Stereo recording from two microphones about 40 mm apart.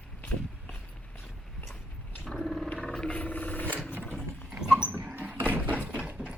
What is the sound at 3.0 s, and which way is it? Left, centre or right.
Vehicle, left.